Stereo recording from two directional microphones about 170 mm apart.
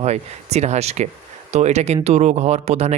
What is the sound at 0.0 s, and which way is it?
Speech, 40° right (ahead or behind).